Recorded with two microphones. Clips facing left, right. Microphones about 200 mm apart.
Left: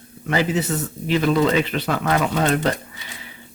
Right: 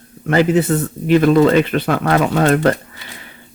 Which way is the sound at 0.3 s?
55° right (ahead or behind).